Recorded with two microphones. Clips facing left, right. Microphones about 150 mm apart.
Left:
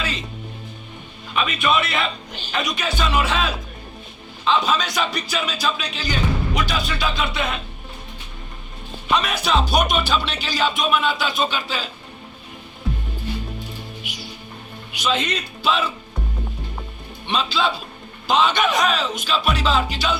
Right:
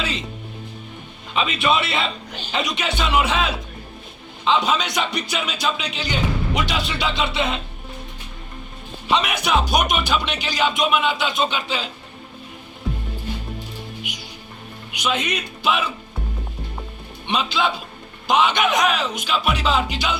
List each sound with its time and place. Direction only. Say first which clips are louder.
1.3 s speech: right 1 dB; 25° right (ahead or behind)
9.0 s music: even; 20° right (ahead or behind)
14.9 s music: left 1 dB; 15° right (ahead or behind)
17.2 s music: even; 15° right (ahead or behind)